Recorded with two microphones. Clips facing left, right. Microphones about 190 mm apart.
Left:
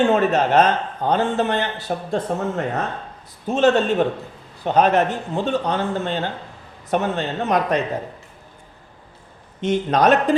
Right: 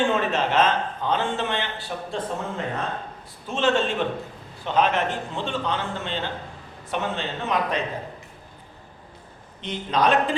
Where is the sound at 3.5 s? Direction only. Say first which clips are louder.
Left 6 dB; 40° left (ahead or behind).